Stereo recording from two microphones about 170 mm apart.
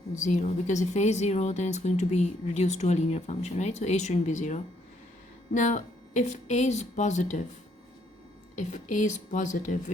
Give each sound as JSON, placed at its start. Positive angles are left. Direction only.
{"t": 0.2, "sound": "speech", "side_deg": 45}
{"t": 8.5, "sound": "speech", "side_deg": 45}